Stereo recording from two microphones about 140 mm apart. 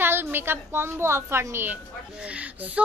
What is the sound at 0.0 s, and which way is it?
A woman's voice, 15° right (ahead or behind).